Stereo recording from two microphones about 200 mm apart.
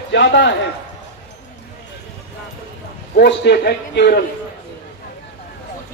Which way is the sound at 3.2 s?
55° left (ahead or behind).